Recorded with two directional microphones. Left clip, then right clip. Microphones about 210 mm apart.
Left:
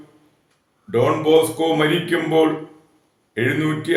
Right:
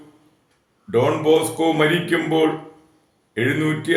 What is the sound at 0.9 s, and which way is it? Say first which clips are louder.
Speech: even; 10° right (ahead or behind).